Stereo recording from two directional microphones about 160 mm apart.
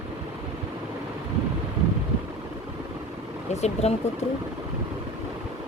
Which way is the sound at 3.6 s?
40° left (ahead or behind).